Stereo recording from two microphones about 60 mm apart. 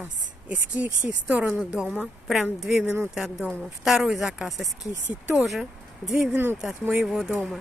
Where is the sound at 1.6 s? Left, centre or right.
Centre.